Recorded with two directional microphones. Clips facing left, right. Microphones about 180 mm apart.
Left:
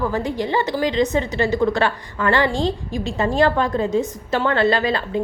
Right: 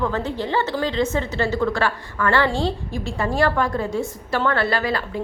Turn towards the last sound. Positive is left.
turn(degrees=20)  # may be behind; listen again after turning